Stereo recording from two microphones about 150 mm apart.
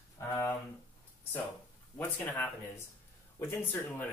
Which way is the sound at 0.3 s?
15° left (ahead or behind).